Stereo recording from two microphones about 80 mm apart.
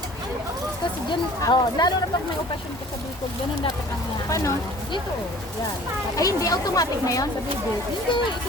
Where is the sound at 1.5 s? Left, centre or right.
Left.